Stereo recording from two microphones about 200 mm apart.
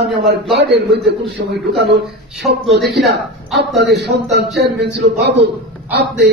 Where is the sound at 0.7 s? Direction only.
55° right (ahead or behind).